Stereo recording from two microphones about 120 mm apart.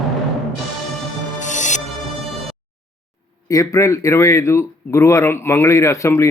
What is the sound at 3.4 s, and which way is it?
Speech, 30° left (ahead or behind).